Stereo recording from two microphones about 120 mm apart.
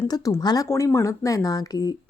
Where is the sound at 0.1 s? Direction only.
30° left (ahead or behind).